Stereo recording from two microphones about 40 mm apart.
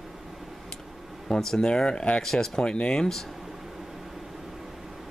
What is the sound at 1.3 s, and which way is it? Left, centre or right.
Speech, centre.